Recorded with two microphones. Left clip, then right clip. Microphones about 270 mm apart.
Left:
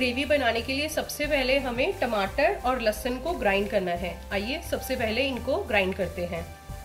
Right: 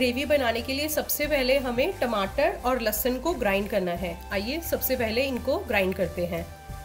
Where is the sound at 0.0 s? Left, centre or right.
Right.